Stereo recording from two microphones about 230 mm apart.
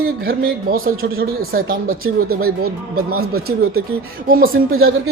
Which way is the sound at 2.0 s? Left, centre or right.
Right.